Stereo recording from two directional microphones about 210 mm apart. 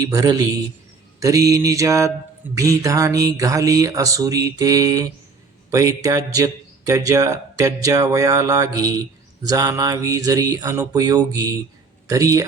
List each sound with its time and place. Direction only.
0.1 s speech: 15° right (ahead or behind)